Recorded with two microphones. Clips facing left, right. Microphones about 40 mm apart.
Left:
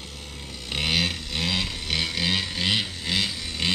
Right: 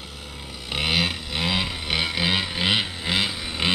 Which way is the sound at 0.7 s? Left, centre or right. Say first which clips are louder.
Right 2 dB; centre.